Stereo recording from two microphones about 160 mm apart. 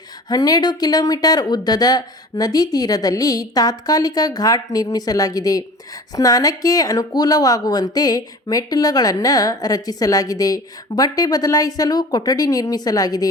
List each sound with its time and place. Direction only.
0.3 s speech: 25° left (ahead or behind)